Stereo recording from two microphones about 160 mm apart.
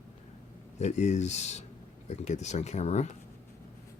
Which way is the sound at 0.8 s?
45° left (ahead or behind).